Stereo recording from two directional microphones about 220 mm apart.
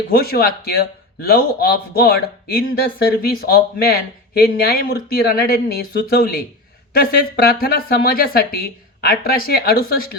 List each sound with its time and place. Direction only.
0.1 s speech: 45° left (ahead or behind)